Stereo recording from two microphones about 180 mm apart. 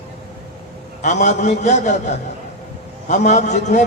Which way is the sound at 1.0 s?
40° left (ahead or behind).